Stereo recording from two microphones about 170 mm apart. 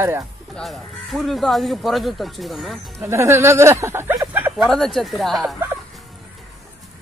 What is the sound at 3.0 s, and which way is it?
Speech, 15° right (ahead or behind).